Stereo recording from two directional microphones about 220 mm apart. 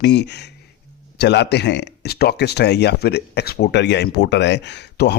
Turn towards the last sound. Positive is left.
turn(degrees=50)  # may be behind; listen again after turning